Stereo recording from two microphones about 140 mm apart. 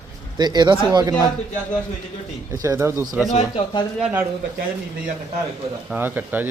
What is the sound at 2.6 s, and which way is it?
Speech, 20° right (ahead or behind).